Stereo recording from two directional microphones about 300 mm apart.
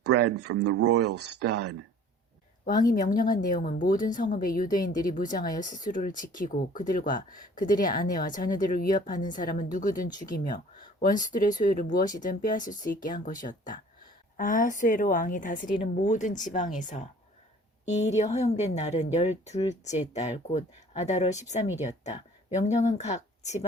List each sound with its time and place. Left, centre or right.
0.4 s speech: right
2.8 s a woman's voice: left